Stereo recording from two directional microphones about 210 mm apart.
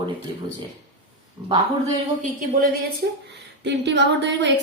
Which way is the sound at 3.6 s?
55° right (ahead or behind).